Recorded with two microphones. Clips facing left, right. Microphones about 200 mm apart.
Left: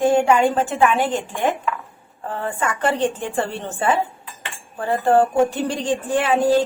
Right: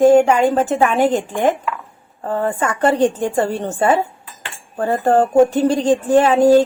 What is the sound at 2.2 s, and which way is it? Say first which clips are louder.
A woman's voice: right 5 dB; 40° right (ahead or behind).